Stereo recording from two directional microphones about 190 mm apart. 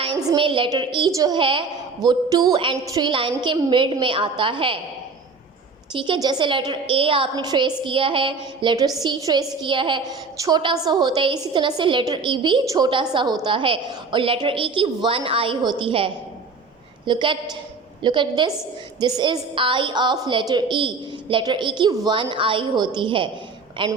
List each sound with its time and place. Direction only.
0.0 s a woman's voice: 25° right (ahead or behind)
5.9 s a woman's voice: 25° right (ahead or behind)